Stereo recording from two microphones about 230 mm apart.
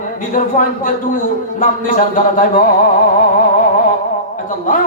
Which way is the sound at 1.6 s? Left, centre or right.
Left.